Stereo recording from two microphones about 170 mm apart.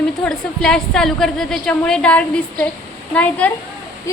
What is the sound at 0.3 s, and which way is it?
A woman's voice, 5° left (ahead or behind).